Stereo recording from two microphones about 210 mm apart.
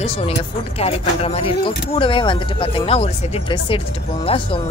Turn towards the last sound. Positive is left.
turn(degrees=25)  # may be behind; listen again after turning